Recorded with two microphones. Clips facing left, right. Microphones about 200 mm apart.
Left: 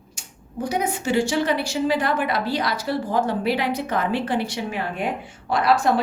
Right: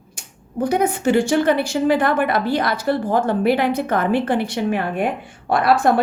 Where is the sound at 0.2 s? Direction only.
55° right (ahead or behind).